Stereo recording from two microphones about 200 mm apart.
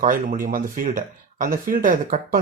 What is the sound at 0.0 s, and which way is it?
Speech, 40° right (ahead or behind).